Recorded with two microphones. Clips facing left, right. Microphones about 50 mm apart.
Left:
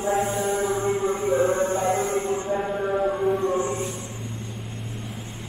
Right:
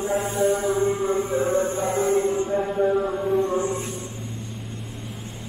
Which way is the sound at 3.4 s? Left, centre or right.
Left.